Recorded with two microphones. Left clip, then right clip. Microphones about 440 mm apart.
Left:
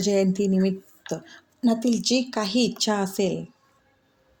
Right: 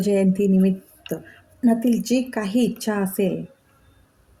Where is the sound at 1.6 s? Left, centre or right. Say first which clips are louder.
Right 2 dB; right.